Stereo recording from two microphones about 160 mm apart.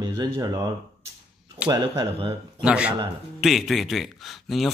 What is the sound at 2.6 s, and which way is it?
A man's voice, 5° right (ahead or behind).